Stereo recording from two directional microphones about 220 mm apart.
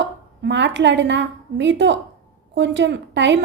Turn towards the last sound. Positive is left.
turn(degrees=-55)  # may be behind; listen again after turning